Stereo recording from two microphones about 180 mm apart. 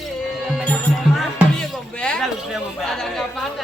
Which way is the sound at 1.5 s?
5° left (ahead or behind).